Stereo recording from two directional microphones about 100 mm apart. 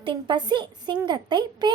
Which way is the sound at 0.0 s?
50° right (ahead or behind).